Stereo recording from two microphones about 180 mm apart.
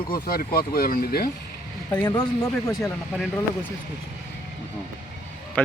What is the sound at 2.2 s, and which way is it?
Speech, 5° left (ahead or behind).